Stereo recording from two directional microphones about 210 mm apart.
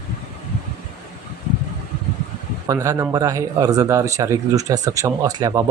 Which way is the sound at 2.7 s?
15° right (ahead or behind).